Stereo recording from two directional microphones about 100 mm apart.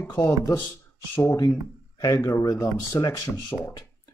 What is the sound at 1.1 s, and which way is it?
Speech, 25° left (ahead or behind).